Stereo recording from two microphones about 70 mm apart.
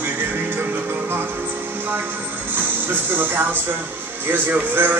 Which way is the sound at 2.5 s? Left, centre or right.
Right.